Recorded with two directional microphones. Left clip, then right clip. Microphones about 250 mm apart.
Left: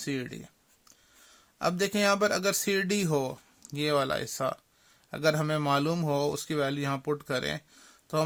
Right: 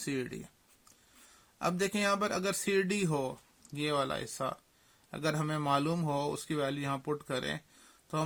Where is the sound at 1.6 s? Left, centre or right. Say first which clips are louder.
Left 4 dB; left.